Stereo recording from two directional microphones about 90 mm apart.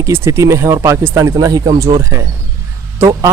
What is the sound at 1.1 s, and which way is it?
A man's voice, 40° right (ahead or behind).